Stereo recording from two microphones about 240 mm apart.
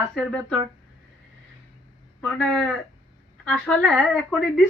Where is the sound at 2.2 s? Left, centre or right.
Centre.